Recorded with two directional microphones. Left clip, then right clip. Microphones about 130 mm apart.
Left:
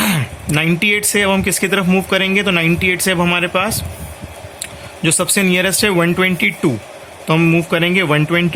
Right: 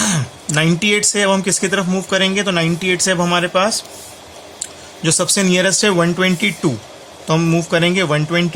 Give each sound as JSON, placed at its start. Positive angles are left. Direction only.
{"t": 0.0, "sound": "speech", "side_deg": 25}
{"t": 5.0, "sound": "speech", "side_deg": 25}